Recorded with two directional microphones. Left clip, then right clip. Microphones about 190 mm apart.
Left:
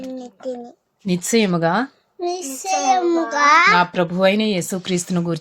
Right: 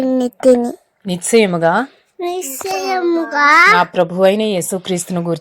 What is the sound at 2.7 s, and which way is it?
A woman's voice, 20° right (ahead or behind).